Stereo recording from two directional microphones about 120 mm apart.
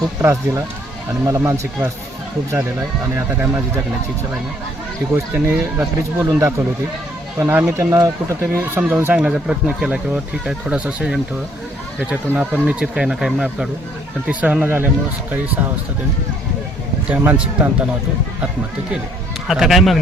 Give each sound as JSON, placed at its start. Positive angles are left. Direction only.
{"t": 0.2, "sound": "speech", "side_deg": -20}
{"t": 3.2, "sound": "speech", "side_deg": -15}
{"t": 5.1, "sound": "speech", "side_deg": -15}
{"t": 17.4, "sound": "speech", "side_deg": -10}
{"t": 19.5, "sound": "speech", "side_deg": 0}